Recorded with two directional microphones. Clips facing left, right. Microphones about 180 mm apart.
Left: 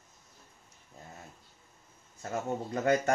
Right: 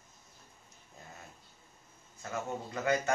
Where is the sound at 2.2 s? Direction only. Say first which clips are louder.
Left 4 dB; 40° left (ahead or behind).